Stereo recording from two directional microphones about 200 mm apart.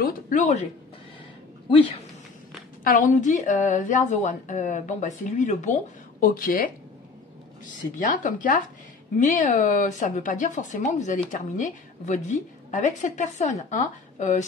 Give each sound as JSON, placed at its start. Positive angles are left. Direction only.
{"t": 0.0, "sound": "a woman's voice", "side_deg": 40}
{"t": 1.7, "sound": "speech", "side_deg": 25}
{"t": 2.8, "sound": "a woman's voice", "side_deg": 40}
{"t": 8.0, "sound": "a woman's voice", "side_deg": 40}